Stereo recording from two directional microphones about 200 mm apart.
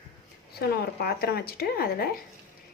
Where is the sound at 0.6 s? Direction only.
50° left (ahead or behind).